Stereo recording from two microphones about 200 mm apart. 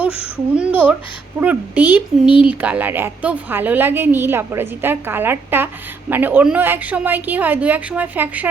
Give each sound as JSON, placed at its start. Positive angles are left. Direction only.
{"t": 0.5, "sound": "a woman's voice", "side_deg": -5}
{"t": 2.2, "sound": "speech", "side_deg": 25}
{"t": 2.5, "sound": "a woman's voice", "side_deg": -10}